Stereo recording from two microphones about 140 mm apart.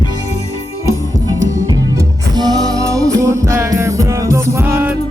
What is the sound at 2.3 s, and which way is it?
Music, 30° right (ahead or behind).